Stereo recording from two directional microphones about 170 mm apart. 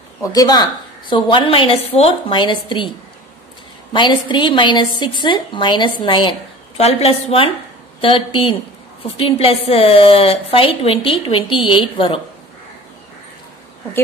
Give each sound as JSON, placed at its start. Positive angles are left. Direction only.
{"t": 0.2, "sound": "a woman's voice", "side_deg": 20}
{"t": 3.9, "sound": "a woman's voice", "side_deg": 25}